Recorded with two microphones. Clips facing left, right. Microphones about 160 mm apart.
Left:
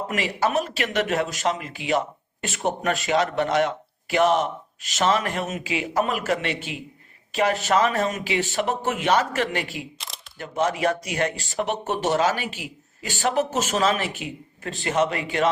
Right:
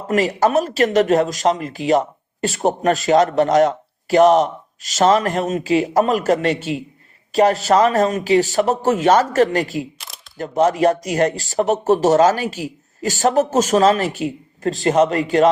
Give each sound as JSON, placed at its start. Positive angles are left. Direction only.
{"t": 0.1, "sound": "speech", "side_deg": -40}